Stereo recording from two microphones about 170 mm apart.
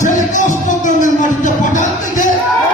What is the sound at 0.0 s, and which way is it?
Music, 45° left (ahead or behind).